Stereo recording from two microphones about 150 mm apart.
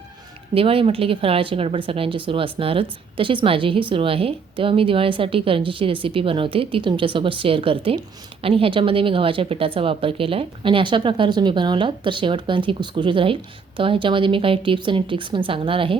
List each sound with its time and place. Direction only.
0.5 s speech: 40° right (ahead or behind)